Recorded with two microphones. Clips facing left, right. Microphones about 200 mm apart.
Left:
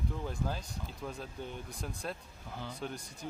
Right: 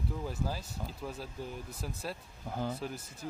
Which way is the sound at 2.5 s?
45° right (ahead or behind).